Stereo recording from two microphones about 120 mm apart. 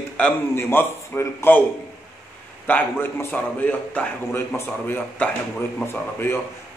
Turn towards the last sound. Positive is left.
turn(degrees=20)  # may be behind; listen again after turning